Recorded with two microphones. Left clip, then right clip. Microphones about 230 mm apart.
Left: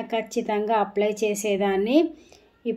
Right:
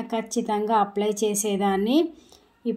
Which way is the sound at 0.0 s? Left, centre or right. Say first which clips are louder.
Left 1 dB; right.